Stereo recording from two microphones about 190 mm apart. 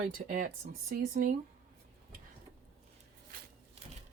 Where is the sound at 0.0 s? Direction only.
45° right (ahead or behind).